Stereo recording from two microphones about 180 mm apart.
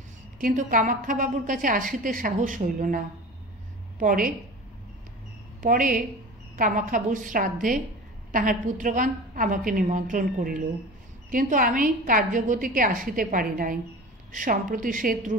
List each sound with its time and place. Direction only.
0.4 s a woman's voice: 50° right (ahead or behind)
4.0 s a woman's voice: 50° right (ahead or behind)
5.6 s a woman's voice: 50° right (ahead or behind)